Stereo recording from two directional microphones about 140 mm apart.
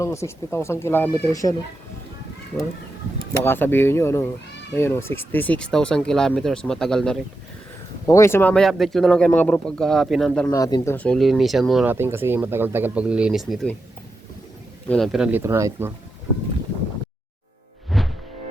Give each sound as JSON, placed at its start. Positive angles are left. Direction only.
{"t": 0.0, "sound": "speech", "side_deg": 20}
{"t": 3.4, "sound": "speech", "side_deg": 15}
{"t": 8.0, "sound": "speech", "side_deg": 20}
{"t": 10.5, "sound": "speech", "side_deg": 25}
{"t": 10.9, "sound": "speech", "side_deg": 10}
{"t": 11.2, "sound": "speech", "side_deg": 0}
{"t": 11.9, "sound": "speech", "side_deg": -15}
{"t": 14.8, "sound": "speech", "side_deg": 5}
{"t": 15.3, "sound": "speech", "side_deg": -15}
{"t": 17.9, "sound": "music", "side_deg": 0}